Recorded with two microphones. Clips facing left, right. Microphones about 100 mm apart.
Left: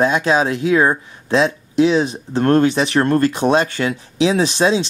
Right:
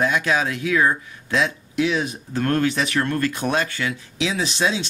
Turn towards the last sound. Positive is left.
turn(degrees=30)  # may be behind; listen again after turning